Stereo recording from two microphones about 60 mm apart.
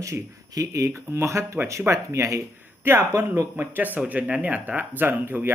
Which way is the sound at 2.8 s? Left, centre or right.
Right.